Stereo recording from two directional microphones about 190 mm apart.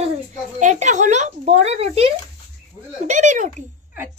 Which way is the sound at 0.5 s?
40° right (ahead or behind).